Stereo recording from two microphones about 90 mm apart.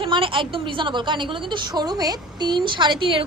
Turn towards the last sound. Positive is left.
turn(degrees=-65)  # may be behind; listen again after turning